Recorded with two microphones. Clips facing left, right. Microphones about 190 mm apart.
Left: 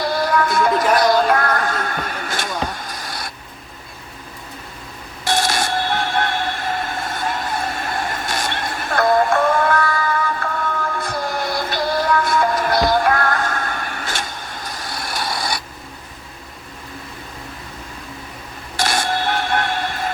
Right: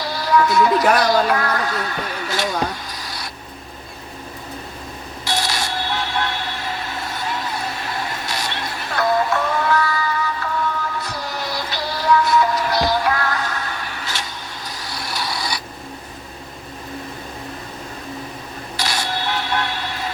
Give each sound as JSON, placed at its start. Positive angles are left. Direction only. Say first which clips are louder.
{"t": 0.0, "sound": "music", "louder": "even", "side_deg": 50}
{"t": 5.2, "sound": "vehicle", "louder": "left 4 dB", "side_deg": 50}
{"t": 18.8, "sound": "a sound", "louder": "left 5 dB", "side_deg": 50}